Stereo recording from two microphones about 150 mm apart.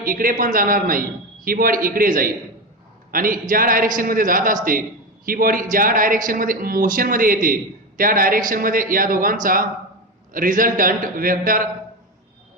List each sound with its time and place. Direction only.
0.0 s a man's voice: 70° right (ahead or behind)